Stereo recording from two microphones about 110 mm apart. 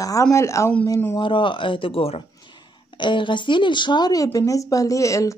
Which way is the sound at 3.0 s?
45° left (ahead or behind).